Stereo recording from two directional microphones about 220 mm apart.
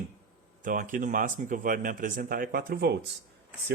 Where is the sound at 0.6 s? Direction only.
40° right (ahead or behind).